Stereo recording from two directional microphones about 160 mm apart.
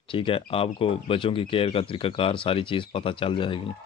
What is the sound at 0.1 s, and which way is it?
Speech, 35° left (ahead or behind).